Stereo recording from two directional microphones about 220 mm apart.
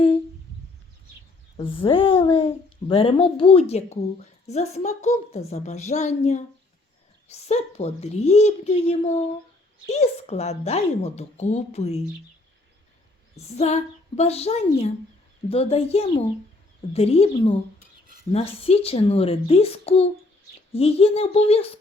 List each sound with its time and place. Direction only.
1.5 s a woman's voice: 25° left (ahead or behind)
13.6 s a woman's voice: 30° left (ahead or behind)